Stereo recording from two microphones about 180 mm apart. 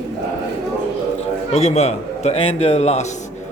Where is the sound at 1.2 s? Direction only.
35° left (ahead or behind).